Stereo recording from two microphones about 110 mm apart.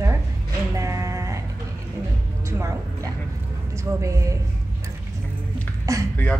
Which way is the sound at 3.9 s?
25° right (ahead or behind).